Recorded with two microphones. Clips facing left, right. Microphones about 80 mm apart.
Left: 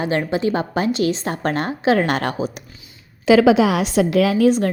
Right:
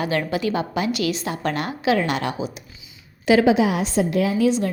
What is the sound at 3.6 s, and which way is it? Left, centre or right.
Speech, left.